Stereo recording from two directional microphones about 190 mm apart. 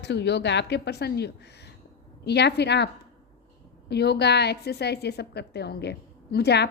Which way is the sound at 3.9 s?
60° left (ahead or behind).